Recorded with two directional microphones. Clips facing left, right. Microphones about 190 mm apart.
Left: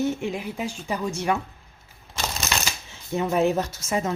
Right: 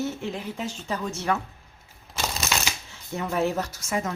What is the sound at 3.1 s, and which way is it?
Speech, 20° left (ahead or behind).